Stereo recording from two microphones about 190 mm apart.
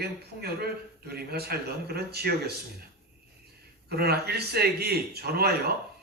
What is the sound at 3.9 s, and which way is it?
A man's voice, 55° right (ahead or behind).